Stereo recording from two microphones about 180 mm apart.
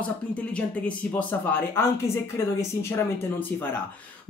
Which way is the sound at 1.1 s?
10° left (ahead or behind).